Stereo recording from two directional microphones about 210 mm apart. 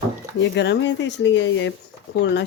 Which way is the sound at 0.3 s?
55° left (ahead or behind).